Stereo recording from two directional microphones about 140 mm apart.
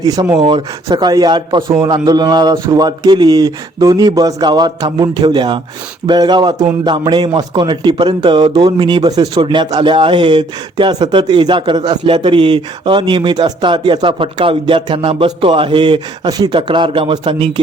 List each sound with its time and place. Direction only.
0.0 s a man's voice: 25° right (ahead or behind)